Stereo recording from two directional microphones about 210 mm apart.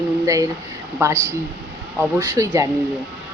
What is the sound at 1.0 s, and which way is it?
Speech, 10° right (ahead or behind).